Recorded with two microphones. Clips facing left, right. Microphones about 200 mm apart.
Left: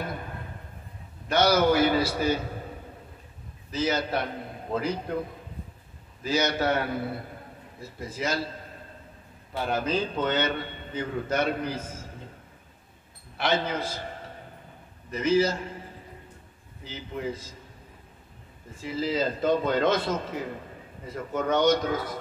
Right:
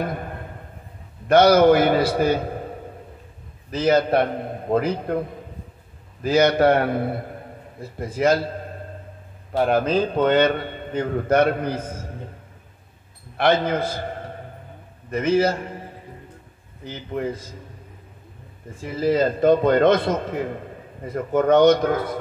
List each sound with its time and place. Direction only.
1.3 s a man's voice: 55° right (ahead or behind)
3.7 s a man's voice: 55° right (ahead or behind)
6.2 s a man's voice: 55° right (ahead or behind)
9.6 s a man's voice: 55° right (ahead or behind)
13.4 s a man's voice: 55° right (ahead or behind)
15.0 s a man's voice: 55° right (ahead or behind)
16.8 s a man's voice: 55° right (ahead or behind)
18.8 s a man's voice: 55° right (ahead or behind)